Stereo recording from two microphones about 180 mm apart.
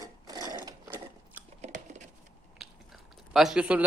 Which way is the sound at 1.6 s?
40° right (ahead or behind).